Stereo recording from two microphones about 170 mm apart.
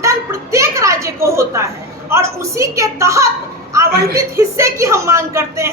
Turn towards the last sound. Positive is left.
turn(degrees=-15)  # may be behind; listen again after turning